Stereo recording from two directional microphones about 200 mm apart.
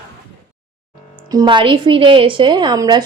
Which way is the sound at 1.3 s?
20° right (ahead or behind).